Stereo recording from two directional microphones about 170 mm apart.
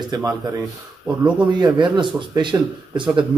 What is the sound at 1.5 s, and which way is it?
Speech, 25° right (ahead or behind).